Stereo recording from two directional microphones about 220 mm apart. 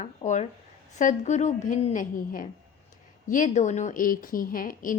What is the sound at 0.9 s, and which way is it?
A woman's voice, 35° left (ahead or behind).